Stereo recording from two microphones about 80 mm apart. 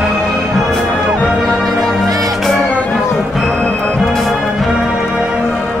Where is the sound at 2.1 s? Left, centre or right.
Right.